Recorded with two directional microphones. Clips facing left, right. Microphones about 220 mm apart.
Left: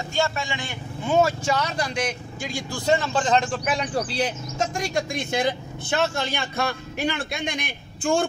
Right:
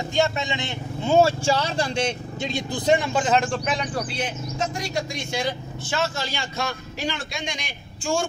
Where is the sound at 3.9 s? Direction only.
35° left (ahead or behind).